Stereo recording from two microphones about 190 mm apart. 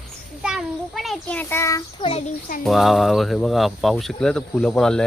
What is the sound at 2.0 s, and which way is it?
Speech, 30° left (ahead or behind).